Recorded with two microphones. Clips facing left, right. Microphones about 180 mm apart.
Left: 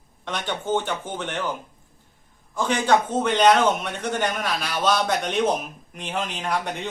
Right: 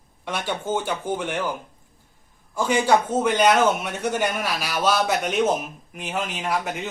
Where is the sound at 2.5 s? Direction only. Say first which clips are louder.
Right 1 dB; 10° right (ahead or behind).